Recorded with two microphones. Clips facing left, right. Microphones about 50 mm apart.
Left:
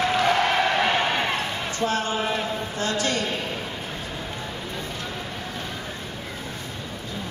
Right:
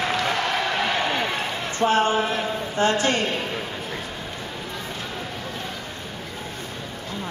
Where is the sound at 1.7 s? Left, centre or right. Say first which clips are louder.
Right 6 dB; right.